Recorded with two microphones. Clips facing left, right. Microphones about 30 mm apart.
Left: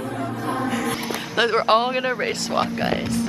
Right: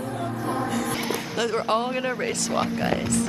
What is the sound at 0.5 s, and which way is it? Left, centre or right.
Music, left.